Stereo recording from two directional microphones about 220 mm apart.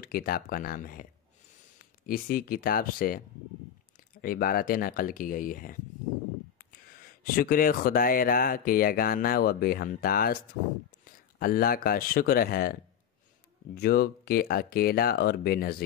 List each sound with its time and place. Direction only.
0.0 s speech: 40° left (ahead or behind)